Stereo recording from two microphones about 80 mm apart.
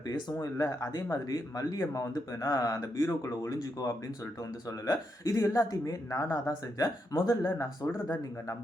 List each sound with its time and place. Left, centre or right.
0.3 s speech: left